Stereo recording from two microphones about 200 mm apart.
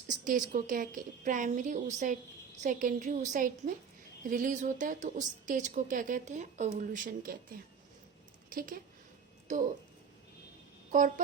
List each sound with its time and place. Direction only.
0.1 s a woman's voice: 40° right (ahead or behind)
8.4 s a woman's voice: 45° right (ahead or behind)